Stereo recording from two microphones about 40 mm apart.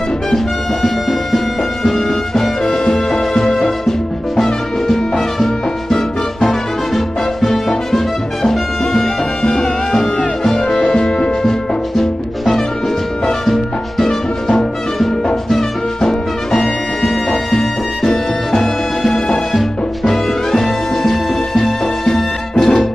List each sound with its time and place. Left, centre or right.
0.8 s music: centre
3.4 s music: left
4.4 s music: centre
9.4 s music: centre
18.5 s music: centre
20.5 s music: centre